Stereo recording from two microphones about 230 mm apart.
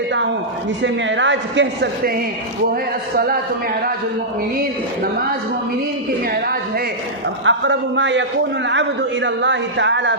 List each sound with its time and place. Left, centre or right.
0.8 s a man's voice: right
6.3 s a woman's voice: right
7.4 s a man's voice: right